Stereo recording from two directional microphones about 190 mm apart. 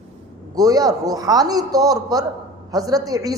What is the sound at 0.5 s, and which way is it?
A woman's voice, 20° right (ahead or behind).